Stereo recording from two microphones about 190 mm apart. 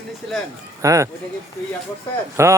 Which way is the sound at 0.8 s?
15° right (ahead or behind).